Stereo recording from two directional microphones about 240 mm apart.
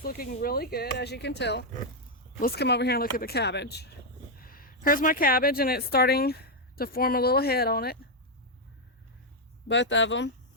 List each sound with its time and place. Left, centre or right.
0.0 s a woman's voice: left
9.6 s speech: left